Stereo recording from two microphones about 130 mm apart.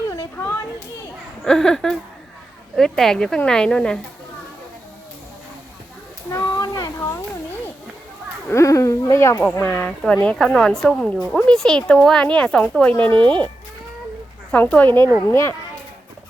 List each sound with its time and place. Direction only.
0.1 s children playing: 20° left (ahead or behind)
1.5 s speech: 5° left (ahead or behind)
6.3 s a sound: 25° left (ahead or behind)
8.4 s speech: 25° left (ahead or behind)
9.4 s speech: 10° left (ahead or behind)
14.5 s speech: 10° left (ahead or behind)